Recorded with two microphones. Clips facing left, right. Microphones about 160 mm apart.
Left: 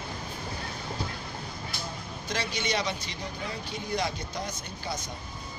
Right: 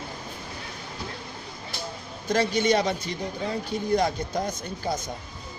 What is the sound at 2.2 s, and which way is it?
Speech, 50° right (ahead or behind).